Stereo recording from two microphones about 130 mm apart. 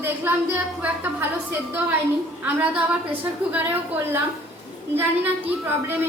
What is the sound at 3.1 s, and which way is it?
Speech, 15° right (ahead or behind).